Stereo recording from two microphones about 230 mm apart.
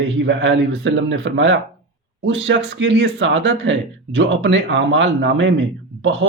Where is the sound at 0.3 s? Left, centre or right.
Right.